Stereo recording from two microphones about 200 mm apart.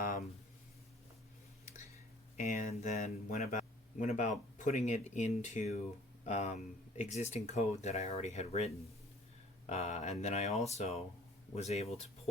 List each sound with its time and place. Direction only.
2.3 s speech: 40° left (ahead or behind)